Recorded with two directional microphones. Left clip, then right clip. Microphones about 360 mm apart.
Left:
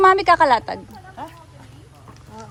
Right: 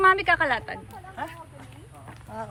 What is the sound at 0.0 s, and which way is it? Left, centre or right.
Speech, centre.